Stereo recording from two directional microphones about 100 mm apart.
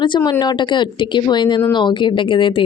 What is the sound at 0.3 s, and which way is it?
A woman's voice, 45° left (ahead or behind).